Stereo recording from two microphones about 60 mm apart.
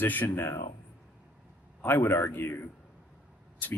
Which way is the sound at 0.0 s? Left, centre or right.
Left.